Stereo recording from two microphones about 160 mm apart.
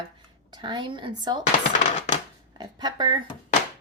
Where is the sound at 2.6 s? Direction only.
25° right (ahead or behind).